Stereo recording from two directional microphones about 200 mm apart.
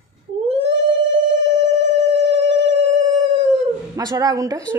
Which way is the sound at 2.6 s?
35° right (ahead or behind).